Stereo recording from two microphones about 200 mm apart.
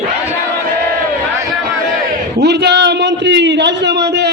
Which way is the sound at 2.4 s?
55° right (ahead or behind).